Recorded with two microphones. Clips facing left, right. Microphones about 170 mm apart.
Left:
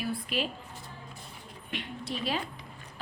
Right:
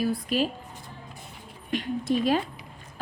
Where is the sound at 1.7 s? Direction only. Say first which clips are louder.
Right 11 dB; 45° right (ahead or behind).